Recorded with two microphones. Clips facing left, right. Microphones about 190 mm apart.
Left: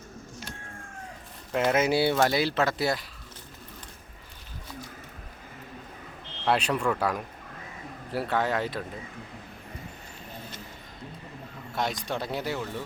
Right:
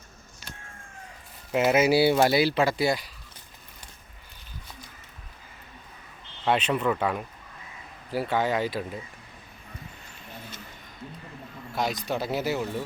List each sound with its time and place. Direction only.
1.5 s speech: 10° right (ahead or behind)
6.4 s speech: 5° right (ahead or behind)
11.7 s speech: centre (ahead or behind)